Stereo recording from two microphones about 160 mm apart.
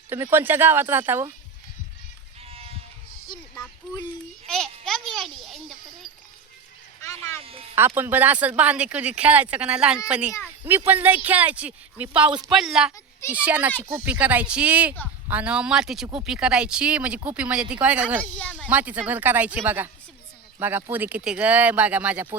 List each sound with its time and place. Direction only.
0.1 s speech: 15° right (ahead or behind)
2.4 s sheep: 40° right (ahead or behind)
4.4 s a child's voice: 5° left (ahead or behind)
7.0 s speech: 20° left (ahead or behind)
7.8 s speech: 15° right (ahead or behind)
18.2 s speech: 10° left (ahead or behind)
18.7 s speech: 10° right (ahead or behind)